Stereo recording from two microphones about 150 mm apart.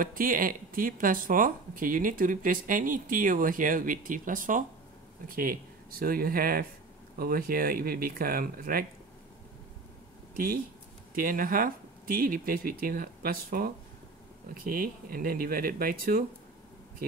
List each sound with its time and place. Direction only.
0.0 s speech: 65° right (ahead or behind)
10.3 s speech: 70° right (ahead or behind)